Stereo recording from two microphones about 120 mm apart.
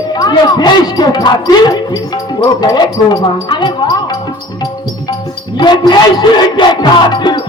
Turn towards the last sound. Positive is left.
turn(degrees=40)  # may be behind; listen again after turning